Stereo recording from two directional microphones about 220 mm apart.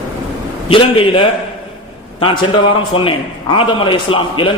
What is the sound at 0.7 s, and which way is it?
Speech, 25° left (ahead or behind).